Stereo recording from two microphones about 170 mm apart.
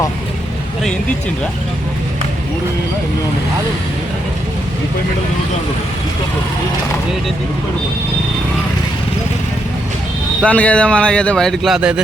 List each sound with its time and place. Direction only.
10.4 s speech: 10° left (ahead or behind)